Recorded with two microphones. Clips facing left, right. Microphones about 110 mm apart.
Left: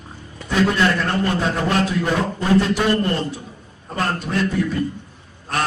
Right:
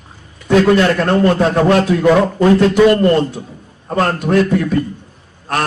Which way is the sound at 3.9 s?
60° right (ahead or behind).